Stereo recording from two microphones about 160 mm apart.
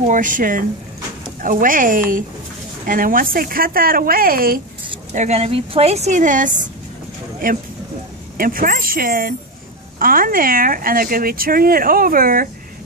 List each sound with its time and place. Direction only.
0.0 s speech: 55° right (ahead or behind)
5.1 s a woman's voice: 45° right (ahead or behind)
8.4 s speech: 60° right (ahead or behind)